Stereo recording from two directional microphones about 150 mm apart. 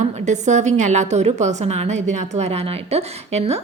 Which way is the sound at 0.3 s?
50° right (ahead or behind).